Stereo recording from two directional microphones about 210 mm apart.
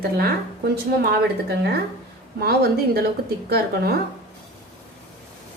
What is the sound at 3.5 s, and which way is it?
Speech, 50° right (ahead or behind).